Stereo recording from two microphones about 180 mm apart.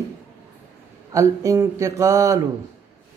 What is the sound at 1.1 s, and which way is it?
Speech, 15° right (ahead or behind).